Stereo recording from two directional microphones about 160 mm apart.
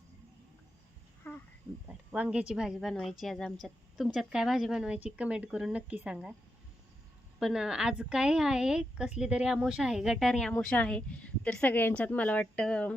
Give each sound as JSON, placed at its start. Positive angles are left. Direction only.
{"t": 1.2, "sound": "a sound", "side_deg": 10}
{"t": 1.9, "sound": "speech", "side_deg": -5}
{"t": 7.3, "sound": "a woman's voice", "side_deg": -5}